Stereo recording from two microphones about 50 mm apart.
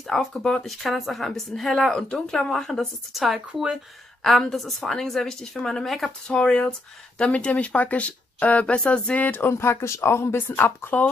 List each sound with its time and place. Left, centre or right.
0.0 s speech: centre
3.1 s speech: centre
4.2 s speech: centre
6.2 s speech: centre
9.2 s speech: left
9.5 s speech: left
10.5 s speech: left